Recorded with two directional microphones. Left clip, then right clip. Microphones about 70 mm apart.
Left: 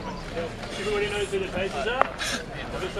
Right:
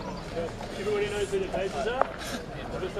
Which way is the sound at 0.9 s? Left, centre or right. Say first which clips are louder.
Left 2 dB; right.